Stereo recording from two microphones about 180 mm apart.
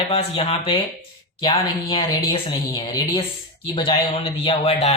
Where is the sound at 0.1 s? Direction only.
35° left (ahead or behind).